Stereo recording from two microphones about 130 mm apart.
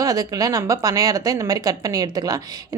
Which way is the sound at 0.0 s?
25° right (ahead or behind).